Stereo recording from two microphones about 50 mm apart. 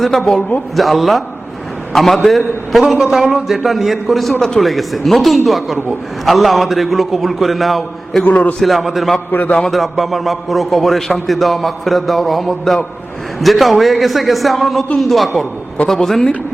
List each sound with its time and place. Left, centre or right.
0.0 s a man's voice: centre
4.4 s a man's voice: centre
4.6 s a man's voice: centre
8.3 s a man's voice: left
8.5 s a man's voice: centre